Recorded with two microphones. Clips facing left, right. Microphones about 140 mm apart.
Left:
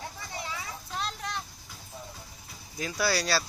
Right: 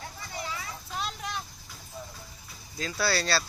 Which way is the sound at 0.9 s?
5° right (ahead or behind).